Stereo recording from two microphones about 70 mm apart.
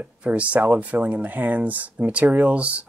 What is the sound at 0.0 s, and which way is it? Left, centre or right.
Speech, centre.